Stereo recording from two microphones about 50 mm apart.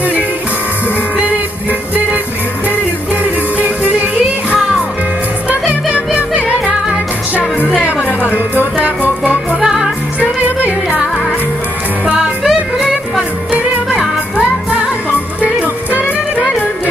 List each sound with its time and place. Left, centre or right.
3.5 s music: right
4.6 s music: centre
5.9 s music: right
7.6 s music: centre
8.2 s music: right
9.6 s music: centre
12.1 s music: centre